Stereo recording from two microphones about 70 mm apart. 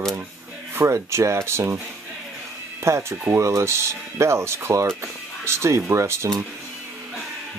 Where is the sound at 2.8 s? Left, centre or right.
Right.